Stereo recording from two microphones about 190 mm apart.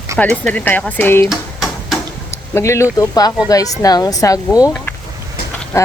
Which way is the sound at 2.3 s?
15° left (ahead or behind).